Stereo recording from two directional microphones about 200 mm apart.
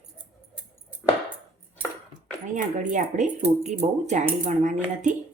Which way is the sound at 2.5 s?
40° right (ahead or behind).